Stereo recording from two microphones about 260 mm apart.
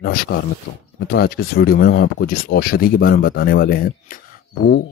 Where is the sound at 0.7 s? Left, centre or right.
Left.